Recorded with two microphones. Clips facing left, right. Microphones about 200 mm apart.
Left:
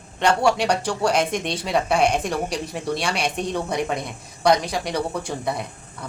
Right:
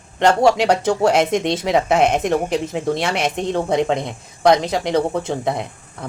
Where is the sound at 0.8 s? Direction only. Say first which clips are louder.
Right 5 dB; 20° right (ahead or behind).